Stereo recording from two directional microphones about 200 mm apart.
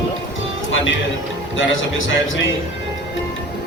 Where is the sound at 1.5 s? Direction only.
75° left (ahead or behind).